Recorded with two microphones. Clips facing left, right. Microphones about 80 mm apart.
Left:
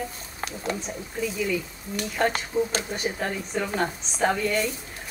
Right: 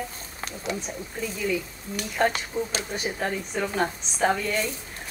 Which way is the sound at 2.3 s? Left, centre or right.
Left.